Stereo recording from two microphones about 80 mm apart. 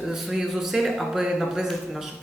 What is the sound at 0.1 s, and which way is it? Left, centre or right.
Speech, centre.